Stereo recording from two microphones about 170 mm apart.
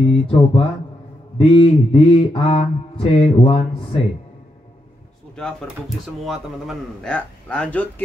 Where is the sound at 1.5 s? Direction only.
30° left (ahead or behind).